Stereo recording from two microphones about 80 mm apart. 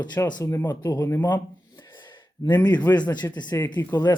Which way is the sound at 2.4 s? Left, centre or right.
Left.